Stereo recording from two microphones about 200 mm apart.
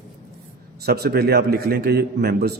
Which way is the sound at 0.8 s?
55° right (ahead or behind).